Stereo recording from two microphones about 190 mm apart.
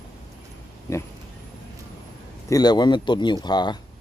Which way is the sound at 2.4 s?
20° left (ahead or behind).